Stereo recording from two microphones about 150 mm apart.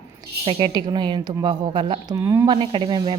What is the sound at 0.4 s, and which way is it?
Speech, 30° right (ahead or behind).